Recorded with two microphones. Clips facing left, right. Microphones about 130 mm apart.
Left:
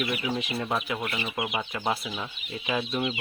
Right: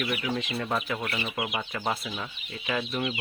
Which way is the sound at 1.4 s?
5° left (ahead or behind).